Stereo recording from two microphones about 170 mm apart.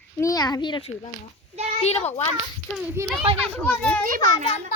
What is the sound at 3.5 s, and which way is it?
Speech, 5° left (ahead or behind).